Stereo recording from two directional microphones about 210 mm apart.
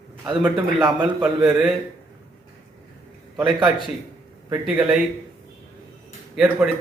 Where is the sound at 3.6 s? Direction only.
20° right (ahead or behind).